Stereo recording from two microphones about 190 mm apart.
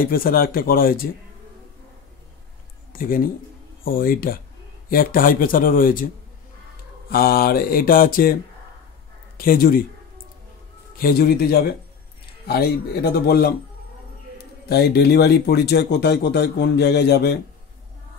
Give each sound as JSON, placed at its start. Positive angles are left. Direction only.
{"t": 0.0, "sound": "mantra", "side_deg": 50}
{"t": 2.9, "sound": "speech", "side_deg": 50}
{"t": 3.8, "sound": "mantra", "side_deg": 50}
{"t": 7.1, "sound": "mantra", "side_deg": 50}
{"t": 9.4, "sound": "mantra", "side_deg": 50}
{"t": 11.0, "sound": "mantra", "side_deg": 50}
{"t": 12.4, "sound": "a man's voice", "side_deg": 55}